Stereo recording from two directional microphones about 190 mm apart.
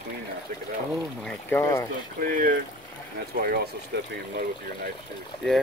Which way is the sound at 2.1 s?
50° right (ahead or behind).